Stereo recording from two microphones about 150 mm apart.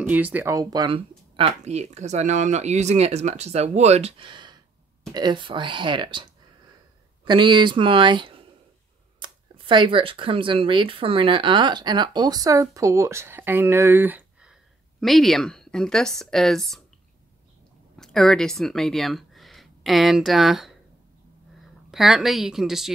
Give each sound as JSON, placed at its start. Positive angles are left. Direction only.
{"t": 0.0, "sound": "speech", "side_deg": -10}
{"t": 7.2, "sound": "speech", "side_deg": -30}
{"t": 17.9, "sound": "speech", "side_deg": 5}
{"t": 21.9, "sound": "speech", "side_deg": 0}